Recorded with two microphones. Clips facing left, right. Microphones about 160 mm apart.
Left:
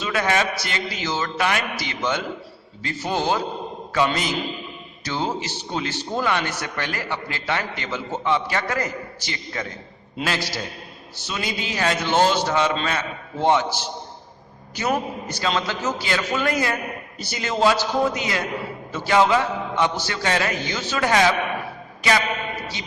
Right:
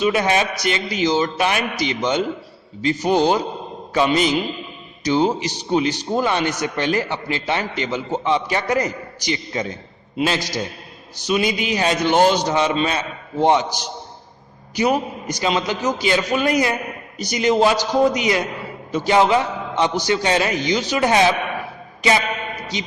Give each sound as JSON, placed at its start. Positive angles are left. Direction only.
{"t": 0.0, "sound": "a man's voice", "side_deg": -20}